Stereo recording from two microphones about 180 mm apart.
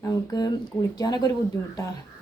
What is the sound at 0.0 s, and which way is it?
Speech, 20° left (ahead or behind).